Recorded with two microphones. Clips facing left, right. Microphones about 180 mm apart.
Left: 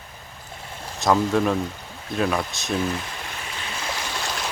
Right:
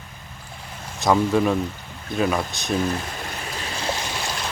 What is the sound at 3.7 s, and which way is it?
Boat, 30° right (ahead or behind).